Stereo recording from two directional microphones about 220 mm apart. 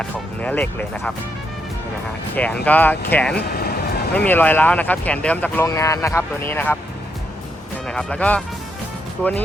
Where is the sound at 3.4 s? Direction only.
45° left (ahead or behind).